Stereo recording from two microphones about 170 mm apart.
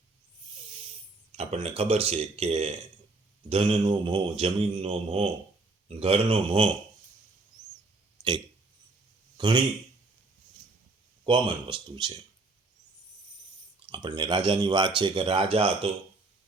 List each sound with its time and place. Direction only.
1.4 s speech: 40° right (ahead or behind)
8.2 s a sound: 25° right (ahead or behind)
9.4 s speech: 25° right (ahead or behind)
11.3 s speech: 30° right (ahead or behind)
13.7 s speech: 30° right (ahead or behind)